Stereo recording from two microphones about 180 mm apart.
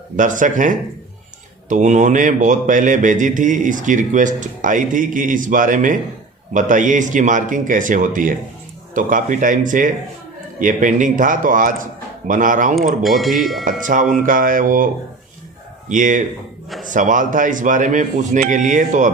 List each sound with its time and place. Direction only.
0.2 s speech: 45° right (ahead or behind)
13.0 s speech: centre (ahead or behind)
13.7 s speech: 45° right (ahead or behind)
15.9 s speech: 45° right (ahead or behind)